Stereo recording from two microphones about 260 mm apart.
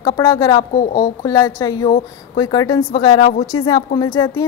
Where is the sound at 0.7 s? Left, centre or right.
Left.